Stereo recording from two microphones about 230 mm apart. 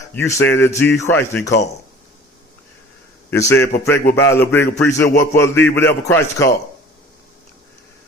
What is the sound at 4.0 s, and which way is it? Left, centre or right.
Speech, left.